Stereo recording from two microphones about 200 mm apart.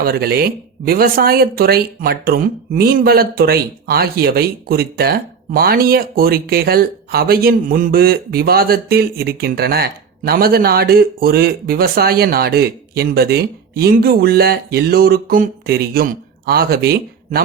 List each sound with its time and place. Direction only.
0.0 s speech: 50° right (ahead or behind)